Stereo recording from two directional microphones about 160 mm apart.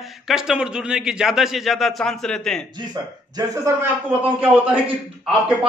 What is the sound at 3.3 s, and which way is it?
Speech, 20° right (ahead or behind).